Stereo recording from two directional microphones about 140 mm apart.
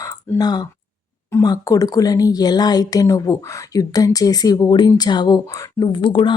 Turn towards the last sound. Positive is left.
turn(degrees=35)  # may be behind; listen again after turning